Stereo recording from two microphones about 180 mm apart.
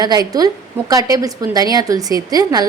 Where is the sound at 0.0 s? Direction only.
20° right (ahead or behind).